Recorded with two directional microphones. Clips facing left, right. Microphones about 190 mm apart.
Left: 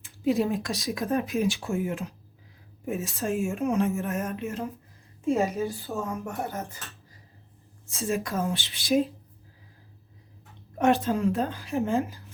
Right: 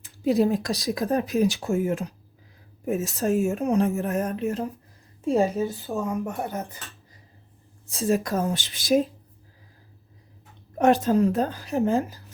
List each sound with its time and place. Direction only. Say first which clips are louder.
0.0 s speech: right 4 dB; 35° right (ahead or behind)
5.6 s speech: right 3 dB; 15° right (ahead or behind)
7.9 s speech: right 5 dB; 35° right (ahead or behind)
10.8 s speech: right 4 dB; 40° right (ahead or behind)